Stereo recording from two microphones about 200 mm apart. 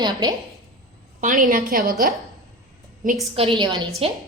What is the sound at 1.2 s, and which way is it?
Speech, 40° right (ahead or behind).